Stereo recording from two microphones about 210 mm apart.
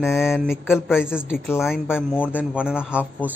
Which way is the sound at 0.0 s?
Centre (ahead or behind).